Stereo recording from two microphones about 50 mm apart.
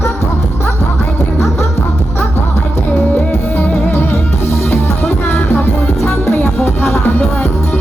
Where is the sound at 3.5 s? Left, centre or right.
Left.